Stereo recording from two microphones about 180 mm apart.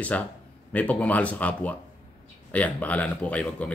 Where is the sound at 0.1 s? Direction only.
10° left (ahead or behind).